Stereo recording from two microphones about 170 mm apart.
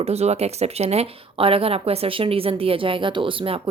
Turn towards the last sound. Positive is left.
turn(degrees=-30)  # may be behind; listen again after turning